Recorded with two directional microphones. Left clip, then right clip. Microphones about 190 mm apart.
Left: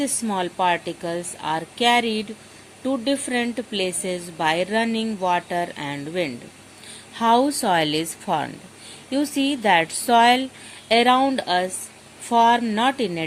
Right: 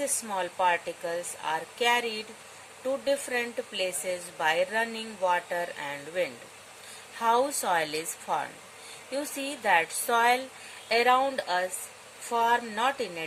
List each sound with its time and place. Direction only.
0.0 s a woman's voice: 35° left (ahead or behind)